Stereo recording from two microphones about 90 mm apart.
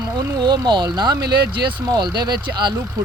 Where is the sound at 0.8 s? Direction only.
50° right (ahead or behind).